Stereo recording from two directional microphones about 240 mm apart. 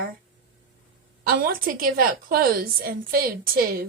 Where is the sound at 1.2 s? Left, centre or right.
Right.